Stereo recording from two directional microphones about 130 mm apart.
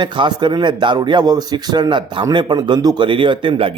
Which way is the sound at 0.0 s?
35° right (ahead or behind).